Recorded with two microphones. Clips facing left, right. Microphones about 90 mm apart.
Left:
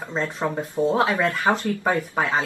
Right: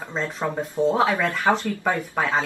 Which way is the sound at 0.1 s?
5° left (ahead or behind).